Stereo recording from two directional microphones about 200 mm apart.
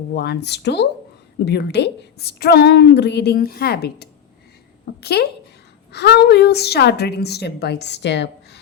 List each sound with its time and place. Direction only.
0.1 s a woman's voice: 55° left (ahead or behind)